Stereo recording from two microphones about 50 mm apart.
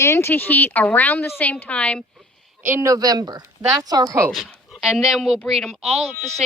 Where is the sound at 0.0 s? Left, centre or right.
Left.